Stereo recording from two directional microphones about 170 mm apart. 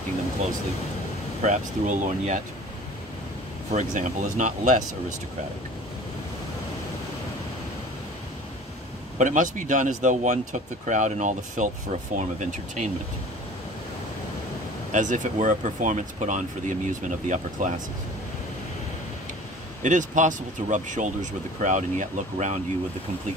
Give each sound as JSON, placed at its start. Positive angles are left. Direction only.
{"t": 1.4, "sound": "speech", "side_deg": -45}
{"t": 3.7, "sound": "speech", "side_deg": -45}
{"t": 9.2, "sound": "speech", "side_deg": -45}
{"t": 14.9, "sound": "speech", "side_deg": -45}
{"t": 19.8, "sound": "speech", "side_deg": -45}